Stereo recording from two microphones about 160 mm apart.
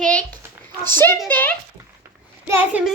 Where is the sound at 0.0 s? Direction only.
5° left (ahead or behind).